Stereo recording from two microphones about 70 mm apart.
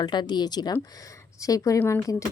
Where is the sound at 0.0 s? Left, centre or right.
Left.